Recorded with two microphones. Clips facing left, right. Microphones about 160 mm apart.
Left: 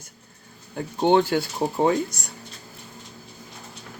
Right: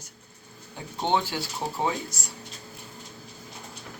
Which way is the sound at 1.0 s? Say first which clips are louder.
Left 8 dB; 55° left (ahead or behind).